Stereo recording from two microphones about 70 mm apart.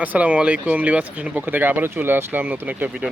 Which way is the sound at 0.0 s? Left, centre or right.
Right.